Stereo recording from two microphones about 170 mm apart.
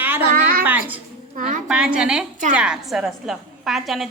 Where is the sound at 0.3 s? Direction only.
60° right (ahead or behind).